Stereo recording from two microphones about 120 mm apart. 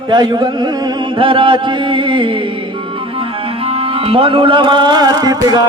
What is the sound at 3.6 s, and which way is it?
Music, 50° right (ahead or behind).